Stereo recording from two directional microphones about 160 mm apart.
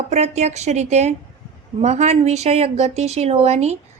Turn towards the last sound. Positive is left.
turn(degrees=-40)  # may be behind; listen again after turning